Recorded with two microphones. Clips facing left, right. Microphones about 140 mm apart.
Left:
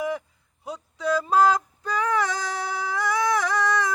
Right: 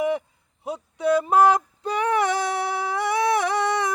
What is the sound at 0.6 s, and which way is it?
Female singing, 25° right (ahead or behind).